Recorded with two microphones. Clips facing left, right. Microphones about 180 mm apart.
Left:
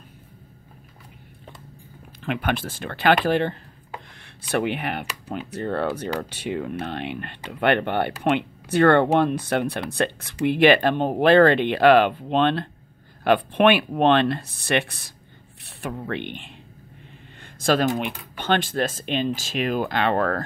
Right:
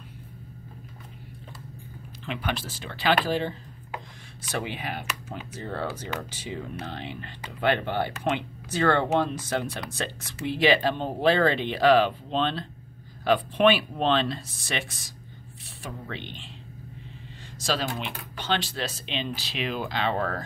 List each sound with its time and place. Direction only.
2.2 s speech: 55° left (ahead or behind)
17.6 s speech: 55° left (ahead or behind)